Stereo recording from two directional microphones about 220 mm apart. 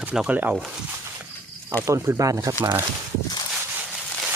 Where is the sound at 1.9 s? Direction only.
10° right (ahead or behind).